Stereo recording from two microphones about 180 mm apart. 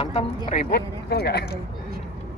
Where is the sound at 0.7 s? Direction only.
60° left (ahead or behind).